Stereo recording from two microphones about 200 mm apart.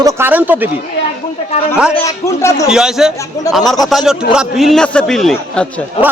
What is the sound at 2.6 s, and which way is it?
A man's voice, 5° right (ahead or behind).